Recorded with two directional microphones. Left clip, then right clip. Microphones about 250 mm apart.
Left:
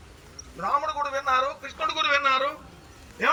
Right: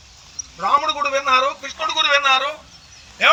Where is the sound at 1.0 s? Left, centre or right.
Right.